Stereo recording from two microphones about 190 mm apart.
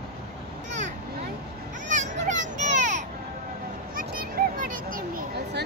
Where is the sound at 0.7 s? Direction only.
40° right (ahead or behind).